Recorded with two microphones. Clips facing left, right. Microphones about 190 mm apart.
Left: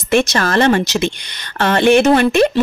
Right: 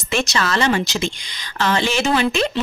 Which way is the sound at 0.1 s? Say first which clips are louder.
Left 6 dB; 55° left (ahead or behind).